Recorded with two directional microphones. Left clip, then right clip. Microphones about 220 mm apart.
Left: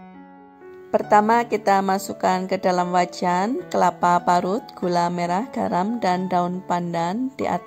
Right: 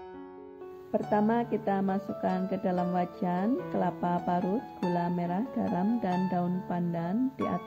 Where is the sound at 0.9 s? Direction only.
20° left (ahead or behind).